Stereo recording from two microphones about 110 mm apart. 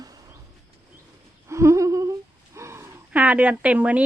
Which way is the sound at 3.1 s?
15° right (ahead or behind).